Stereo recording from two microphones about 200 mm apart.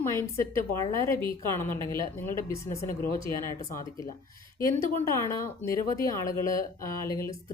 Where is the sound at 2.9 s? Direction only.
45° left (ahead or behind).